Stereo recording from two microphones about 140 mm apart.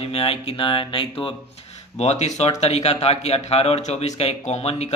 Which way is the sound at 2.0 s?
55° left (ahead or behind).